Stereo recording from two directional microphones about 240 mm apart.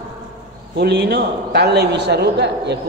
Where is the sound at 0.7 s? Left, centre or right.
Right.